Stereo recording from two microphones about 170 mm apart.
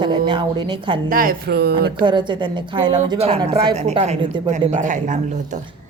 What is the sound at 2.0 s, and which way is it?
A woman's voice, 25° right (ahead or behind).